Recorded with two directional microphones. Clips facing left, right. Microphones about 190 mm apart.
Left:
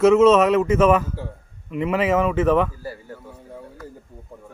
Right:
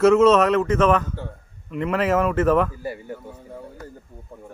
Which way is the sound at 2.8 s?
20° right (ahead or behind).